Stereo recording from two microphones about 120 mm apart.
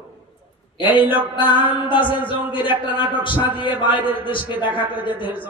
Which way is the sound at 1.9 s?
45° left (ahead or behind).